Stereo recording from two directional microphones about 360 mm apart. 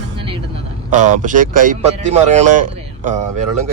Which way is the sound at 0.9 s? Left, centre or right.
Right.